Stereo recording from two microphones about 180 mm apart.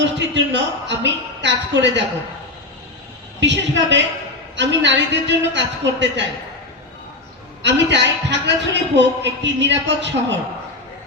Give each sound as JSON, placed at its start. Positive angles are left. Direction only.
{"t": 0.0, "sound": "a woman's voice", "side_deg": -80}
{"t": 3.4, "sound": "a woman's voice", "side_deg": -80}
{"t": 7.6, "sound": "a man's voice", "side_deg": -75}